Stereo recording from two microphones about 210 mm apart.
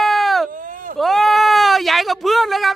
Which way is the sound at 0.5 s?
40° right (ahead or behind).